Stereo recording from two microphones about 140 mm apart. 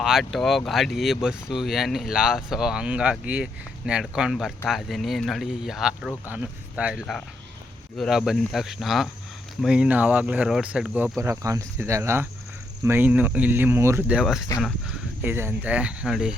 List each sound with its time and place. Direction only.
0.0 s speech: centre (ahead or behind)
11.2 s speech: 20° right (ahead or behind)
14.2 s speech: centre (ahead or behind)
15.2 s speech: 15° right (ahead or behind)